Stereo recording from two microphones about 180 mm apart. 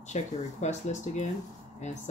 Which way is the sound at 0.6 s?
40° left (ahead or behind).